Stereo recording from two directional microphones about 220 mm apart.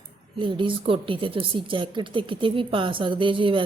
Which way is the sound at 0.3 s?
20° right (ahead or behind).